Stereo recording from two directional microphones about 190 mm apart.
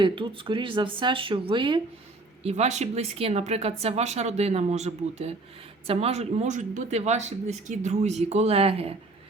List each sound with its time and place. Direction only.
0.0 s speech: 25° right (ahead or behind)
2.4 s speech: 35° right (ahead or behind)